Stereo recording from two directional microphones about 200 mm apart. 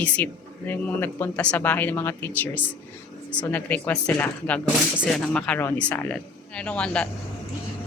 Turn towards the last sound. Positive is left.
turn(degrees=5)  # may be behind; listen again after turning